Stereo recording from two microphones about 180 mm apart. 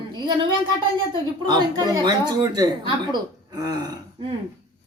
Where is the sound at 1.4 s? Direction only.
25° right (ahead or behind).